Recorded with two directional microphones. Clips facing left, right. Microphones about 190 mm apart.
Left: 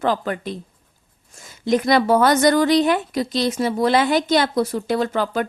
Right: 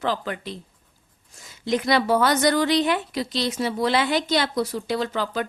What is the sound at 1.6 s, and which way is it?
A woman's voice, 50° left (ahead or behind).